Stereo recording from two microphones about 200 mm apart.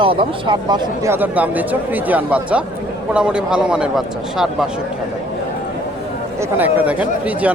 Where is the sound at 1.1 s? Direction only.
10° right (ahead or behind).